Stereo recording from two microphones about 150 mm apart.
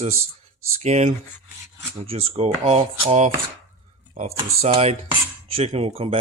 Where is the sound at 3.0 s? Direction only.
45° right (ahead or behind).